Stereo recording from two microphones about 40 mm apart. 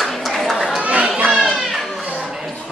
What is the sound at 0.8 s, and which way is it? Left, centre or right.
Children playing, right.